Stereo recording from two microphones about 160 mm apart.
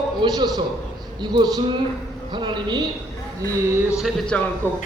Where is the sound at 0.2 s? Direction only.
25° right (ahead or behind).